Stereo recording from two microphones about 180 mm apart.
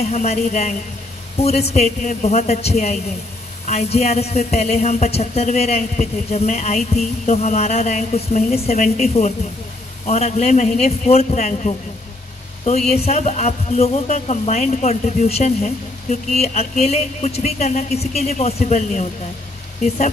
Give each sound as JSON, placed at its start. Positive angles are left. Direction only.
{"t": 0.0, "sound": "a man's voice", "side_deg": 35}